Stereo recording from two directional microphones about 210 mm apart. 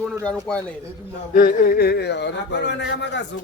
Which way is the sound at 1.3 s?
40° left (ahead or behind).